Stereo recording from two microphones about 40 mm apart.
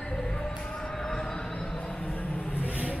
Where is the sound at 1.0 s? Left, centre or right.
Centre.